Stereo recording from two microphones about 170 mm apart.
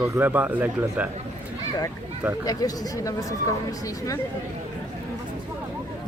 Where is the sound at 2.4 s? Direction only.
20° left (ahead or behind).